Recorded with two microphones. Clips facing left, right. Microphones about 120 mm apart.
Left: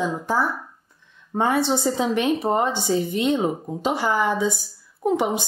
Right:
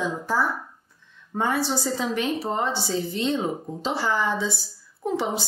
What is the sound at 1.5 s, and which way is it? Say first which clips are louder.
A woman's voice: left 4 dB; 20° left (ahead or behind).